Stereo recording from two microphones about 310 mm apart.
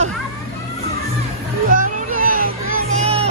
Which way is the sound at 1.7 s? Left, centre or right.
Right.